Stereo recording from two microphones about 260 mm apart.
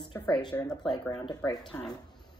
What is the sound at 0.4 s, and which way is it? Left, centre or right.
Speech, centre.